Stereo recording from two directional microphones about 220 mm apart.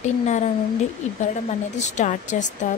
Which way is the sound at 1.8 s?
35° left (ahead or behind).